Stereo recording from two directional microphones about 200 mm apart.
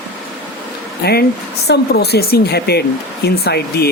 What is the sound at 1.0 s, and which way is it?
Speech, 50° left (ahead or behind).